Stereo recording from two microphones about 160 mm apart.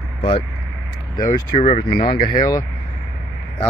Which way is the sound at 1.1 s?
25° left (ahead or behind).